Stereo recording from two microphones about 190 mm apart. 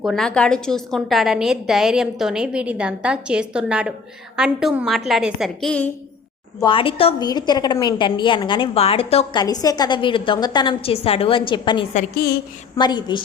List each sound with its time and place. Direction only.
0.0 s a woman's voice: centre (ahead or behind)
6.6 s a woman's voice: 25° left (ahead or behind)
11.9 s a woman's voice: 55° left (ahead or behind)
12.7 s a woman's voice: 20° left (ahead or behind)